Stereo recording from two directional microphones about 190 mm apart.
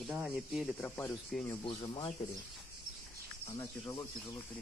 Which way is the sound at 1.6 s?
25° left (ahead or behind).